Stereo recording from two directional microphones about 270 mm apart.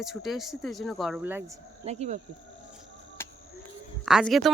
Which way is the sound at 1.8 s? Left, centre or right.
Right.